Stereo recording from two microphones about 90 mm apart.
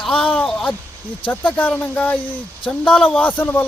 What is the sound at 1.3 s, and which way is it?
Speech, 15° left (ahead or behind).